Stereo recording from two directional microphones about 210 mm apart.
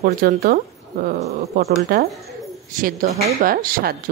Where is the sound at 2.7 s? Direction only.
40° right (ahead or behind).